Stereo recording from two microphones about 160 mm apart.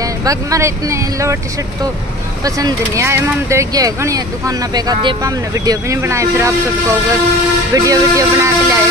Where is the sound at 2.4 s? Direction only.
20° right (ahead or behind).